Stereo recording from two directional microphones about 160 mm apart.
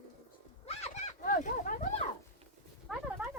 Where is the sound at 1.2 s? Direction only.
60° left (ahead or behind).